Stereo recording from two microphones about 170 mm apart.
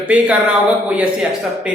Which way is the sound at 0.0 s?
5° right (ahead or behind).